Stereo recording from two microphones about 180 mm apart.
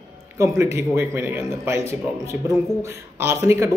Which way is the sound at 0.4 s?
15° right (ahead or behind).